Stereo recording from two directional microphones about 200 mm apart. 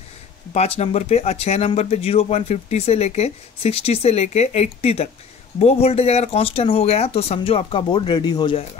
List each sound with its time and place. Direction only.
0.5 s speech: 30° left (ahead or behind)